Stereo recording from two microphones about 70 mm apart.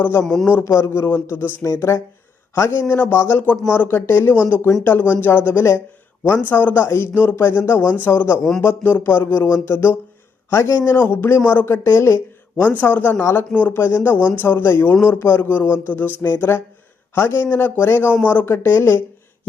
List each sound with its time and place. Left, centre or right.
0.0 s a man's voice: left
0.8 s a man's voice: left
1.6 s a man's voice: left
12.6 s a man's voice: left
13.1 s a man's voice: left
13.5 s a man's voice: left
13.7 s a man's voice: left
18.4 s a man's voice: left